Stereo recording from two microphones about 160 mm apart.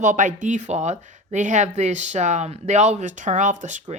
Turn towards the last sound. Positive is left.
turn(degrees=-50)  # may be behind; listen again after turning